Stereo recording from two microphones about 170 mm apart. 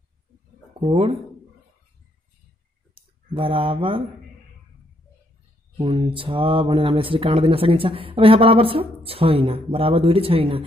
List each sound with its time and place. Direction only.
0.7 s speech: 30° right (ahead or behind)
2.9 s a sound: 35° right (ahead or behind)
5.8 s speech: 30° right (ahead or behind)